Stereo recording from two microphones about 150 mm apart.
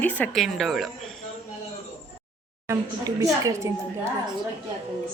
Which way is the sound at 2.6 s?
20° right (ahead or behind).